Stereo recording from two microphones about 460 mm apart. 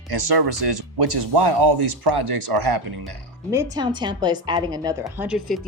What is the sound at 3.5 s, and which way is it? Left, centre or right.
A woman's voice, centre.